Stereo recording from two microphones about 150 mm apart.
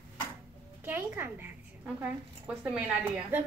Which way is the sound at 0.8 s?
15° right (ahead or behind).